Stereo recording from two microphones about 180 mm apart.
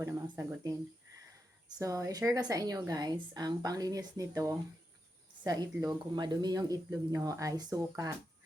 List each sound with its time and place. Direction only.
0.0 s speech: 15° right (ahead or behind)
1.8 s a woman's voice: 15° right (ahead or behind)